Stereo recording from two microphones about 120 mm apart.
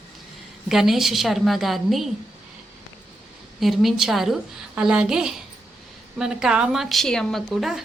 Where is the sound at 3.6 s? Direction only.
Centre (ahead or behind).